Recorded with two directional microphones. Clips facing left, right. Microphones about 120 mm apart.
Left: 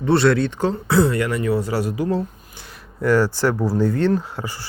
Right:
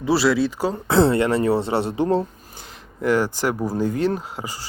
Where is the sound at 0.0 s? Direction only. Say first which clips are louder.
Left 2 dB; 5° right (ahead or behind).